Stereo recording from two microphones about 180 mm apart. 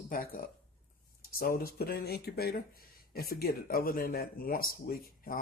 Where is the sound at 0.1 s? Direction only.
50° left (ahead or behind).